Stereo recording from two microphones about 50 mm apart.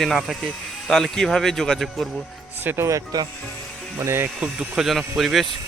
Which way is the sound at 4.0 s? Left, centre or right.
Right.